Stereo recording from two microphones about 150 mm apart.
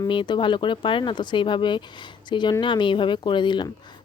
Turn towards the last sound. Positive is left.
turn(degrees=30)  # may be behind; listen again after turning